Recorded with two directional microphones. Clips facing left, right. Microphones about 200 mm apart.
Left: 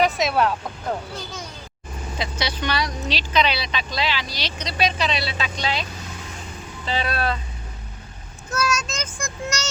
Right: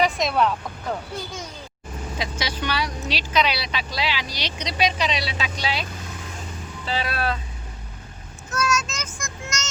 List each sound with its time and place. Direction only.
0.0 s speech: centre (ahead or behind)
2.4 s speech: 10° right (ahead or behind)
6.8 s speech: 5° right (ahead or behind)
8.4 s speech: 35° left (ahead or behind)